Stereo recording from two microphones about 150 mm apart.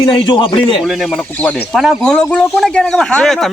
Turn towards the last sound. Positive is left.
turn(degrees=5)  # may be behind; listen again after turning